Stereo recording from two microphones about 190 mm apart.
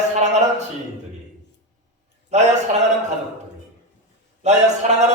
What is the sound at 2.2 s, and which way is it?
Speech, 35° right (ahead or behind).